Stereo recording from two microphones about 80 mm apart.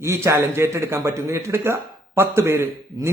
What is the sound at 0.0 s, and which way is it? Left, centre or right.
Speech, right.